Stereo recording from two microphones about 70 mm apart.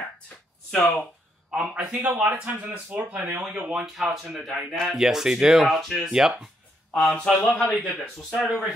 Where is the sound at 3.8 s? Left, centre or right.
Centre.